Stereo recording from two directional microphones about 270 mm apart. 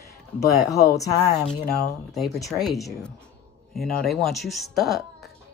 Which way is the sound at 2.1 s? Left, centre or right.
Centre.